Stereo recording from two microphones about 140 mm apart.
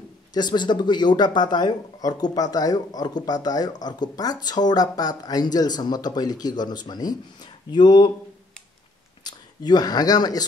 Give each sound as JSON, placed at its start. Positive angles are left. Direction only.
{"t": 0.3, "sound": "speech", "side_deg": 30}
{"t": 9.2, "sound": "speech", "side_deg": 30}